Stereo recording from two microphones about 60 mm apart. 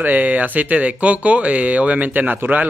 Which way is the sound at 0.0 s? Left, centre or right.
Right.